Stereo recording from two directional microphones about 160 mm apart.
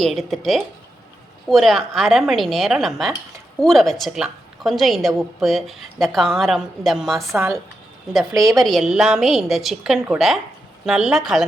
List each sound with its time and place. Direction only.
0.0 s a woman's voice: centre (ahead or behind)
7.3 s speech: 15° right (ahead or behind)
8.4 s a woman's voice: centre (ahead or behind)